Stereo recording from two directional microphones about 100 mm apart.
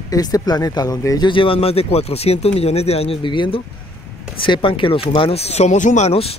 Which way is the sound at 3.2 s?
55° left (ahead or behind).